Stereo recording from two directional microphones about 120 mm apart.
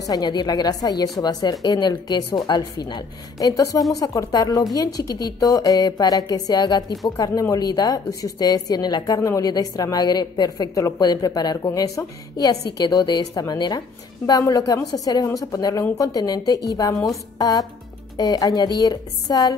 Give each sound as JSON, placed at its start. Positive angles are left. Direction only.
{"t": 0.1, "sound": "a woman's voice", "side_deg": 35}
{"t": 16.9, "sound": "a woman's voice", "side_deg": 0}
{"t": 17.4, "sound": "a woman's voice", "side_deg": 30}